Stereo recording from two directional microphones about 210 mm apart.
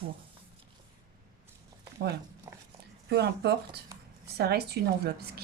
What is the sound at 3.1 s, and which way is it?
A woman's voice, 50° right (ahead or behind).